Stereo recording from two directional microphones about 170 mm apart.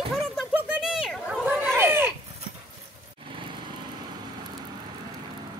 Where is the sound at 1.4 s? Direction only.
10° right (ahead or behind).